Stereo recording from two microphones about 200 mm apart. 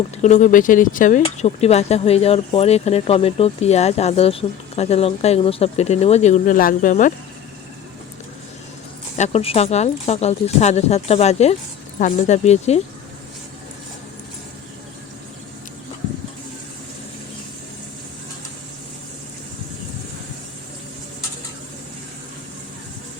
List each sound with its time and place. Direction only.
0.2 s speech: 35° left (ahead or behind)
9.1 s speech: 35° left (ahead or behind)